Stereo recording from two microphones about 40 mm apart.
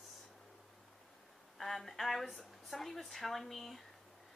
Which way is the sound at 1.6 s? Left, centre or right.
Centre.